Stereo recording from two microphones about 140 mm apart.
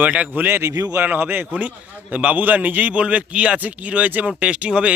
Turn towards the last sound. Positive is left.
turn(degrees=-10)  # may be behind; listen again after turning